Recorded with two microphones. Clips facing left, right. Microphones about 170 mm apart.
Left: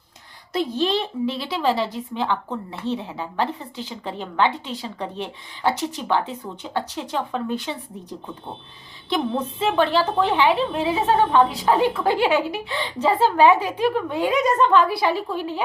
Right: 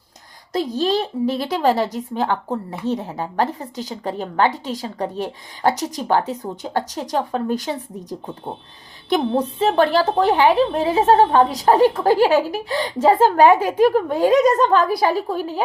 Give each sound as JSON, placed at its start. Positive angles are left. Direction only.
{"t": 0.5, "sound": "a woman's voice", "side_deg": -40}
{"t": 9.0, "sound": "a woman's voice", "side_deg": -35}